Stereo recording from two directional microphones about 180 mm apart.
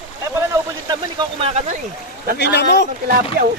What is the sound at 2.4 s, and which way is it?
Speech, 75° left (ahead or behind).